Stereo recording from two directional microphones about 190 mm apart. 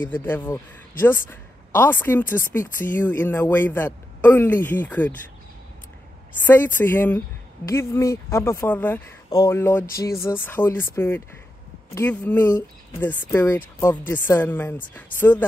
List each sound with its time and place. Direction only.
0.0 s a man's voice: 10° left (ahead or behind)
6.4 s a man's voice: 10° left (ahead or behind)